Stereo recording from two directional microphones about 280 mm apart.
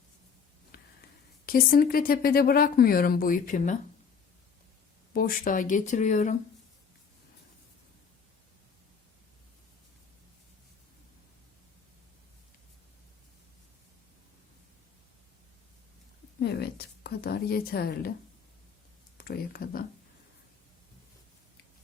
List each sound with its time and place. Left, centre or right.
0.7 s a sound: left
1.5 s speech: left
5.1 s speech: left
16.4 s speech: left
19.1 s speech: left